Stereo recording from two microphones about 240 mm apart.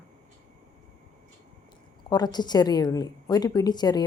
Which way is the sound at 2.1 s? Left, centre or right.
Centre.